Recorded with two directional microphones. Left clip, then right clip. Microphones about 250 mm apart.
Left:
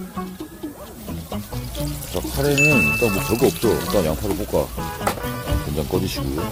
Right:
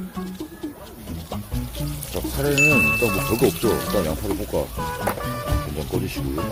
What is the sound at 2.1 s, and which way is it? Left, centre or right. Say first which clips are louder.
Speech: left 2 dB; centre.